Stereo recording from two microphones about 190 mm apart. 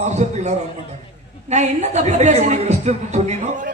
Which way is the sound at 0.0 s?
35° right (ahead or behind).